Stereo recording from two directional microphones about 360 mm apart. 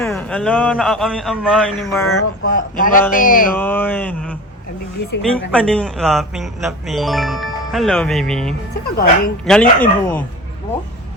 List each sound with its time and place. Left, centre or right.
0.0 s speech: centre
2.0 s speech: left
2.6 s speech: left
3.6 s speech: centre
5.5 s speech: centre
8.7 s speech: left
9.4 s speech: centre